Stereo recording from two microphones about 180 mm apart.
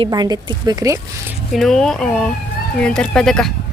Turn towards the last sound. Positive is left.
turn(degrees=5)  # may be behind; listen again after turning